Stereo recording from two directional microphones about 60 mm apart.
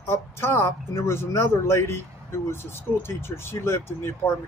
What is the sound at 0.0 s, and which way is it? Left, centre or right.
Speech, left.